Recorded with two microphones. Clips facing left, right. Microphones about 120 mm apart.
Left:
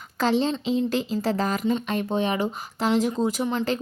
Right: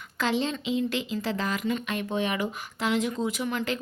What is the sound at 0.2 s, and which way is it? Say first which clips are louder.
A woman's voice: left 5 dB; 35° left (ahead or behind).